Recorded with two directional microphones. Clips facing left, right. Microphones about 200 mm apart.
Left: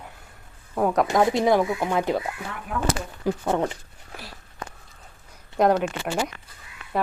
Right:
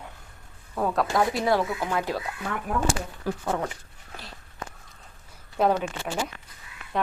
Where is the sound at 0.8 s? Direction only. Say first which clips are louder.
Left 4 dB; 15° left (ahead or behind).